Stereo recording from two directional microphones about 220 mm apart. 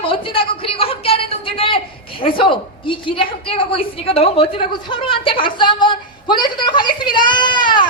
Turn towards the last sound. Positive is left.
turn(degrees=20)  # may be behind; listen again after turning